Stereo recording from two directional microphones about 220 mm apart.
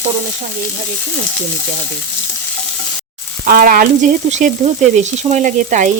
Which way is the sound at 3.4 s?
40° right (ahead or behind).